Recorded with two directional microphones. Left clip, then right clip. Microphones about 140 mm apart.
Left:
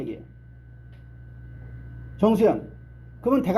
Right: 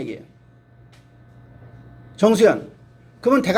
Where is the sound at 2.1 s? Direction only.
15° right (ahead or behind).